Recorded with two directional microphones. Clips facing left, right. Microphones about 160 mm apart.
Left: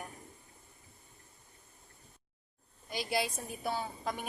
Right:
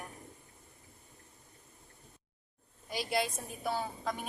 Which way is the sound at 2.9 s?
5° left (ahead or behind).